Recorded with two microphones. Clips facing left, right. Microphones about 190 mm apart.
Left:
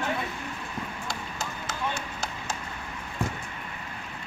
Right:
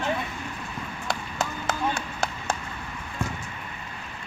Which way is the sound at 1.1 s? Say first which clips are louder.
Right 5 dB; 60° right (ahead or behind).